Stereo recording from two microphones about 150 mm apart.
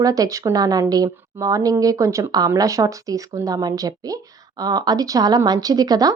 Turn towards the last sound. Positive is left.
turn(degrees=-25)  # may be behind; listen again after turning